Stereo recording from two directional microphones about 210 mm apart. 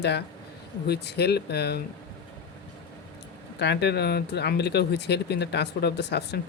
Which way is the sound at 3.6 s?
55° left (ahead or behind).